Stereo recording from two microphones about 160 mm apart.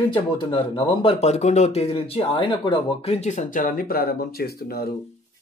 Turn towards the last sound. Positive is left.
turn(degrees=75)  # may be behind; listen again after turning